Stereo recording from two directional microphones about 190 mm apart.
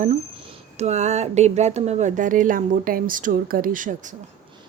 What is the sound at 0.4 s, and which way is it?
Speech, 35° right (ahead or behind).